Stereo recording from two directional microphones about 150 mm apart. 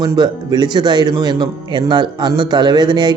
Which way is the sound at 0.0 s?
30° right (ahead or behind).